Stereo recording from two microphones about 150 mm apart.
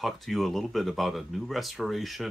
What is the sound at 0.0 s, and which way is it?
Speech, centre (ahead or behind).